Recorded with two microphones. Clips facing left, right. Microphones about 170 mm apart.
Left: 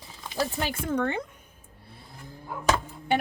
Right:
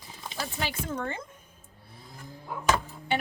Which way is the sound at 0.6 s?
50° left (ahead or behind).